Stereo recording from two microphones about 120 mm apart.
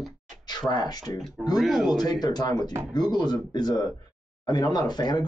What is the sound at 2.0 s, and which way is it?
Speech, 35° left (ahead or behind).